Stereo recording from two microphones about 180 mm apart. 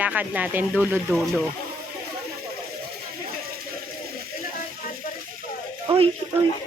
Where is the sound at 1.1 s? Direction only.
Centre (ahead or behind).